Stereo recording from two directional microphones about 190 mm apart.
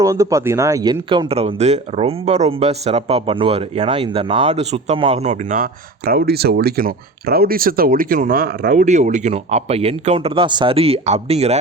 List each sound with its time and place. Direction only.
0.0 s speech: 15° right (ahead or behind); by 11.5 s 35° right (ahead or behind)